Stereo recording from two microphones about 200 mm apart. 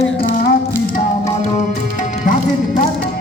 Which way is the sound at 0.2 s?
45° left (ahead or behind).